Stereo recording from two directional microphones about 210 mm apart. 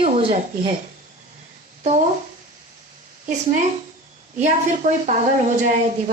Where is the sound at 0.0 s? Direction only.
25° right (ahead or behind).